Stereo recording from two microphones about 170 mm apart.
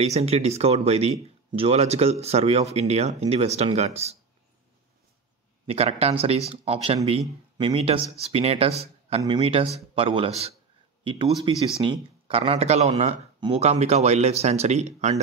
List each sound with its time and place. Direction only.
0.0 s speech: 40° right (ahead or behind)
5.7 s speech: 35° right (ahead or behind)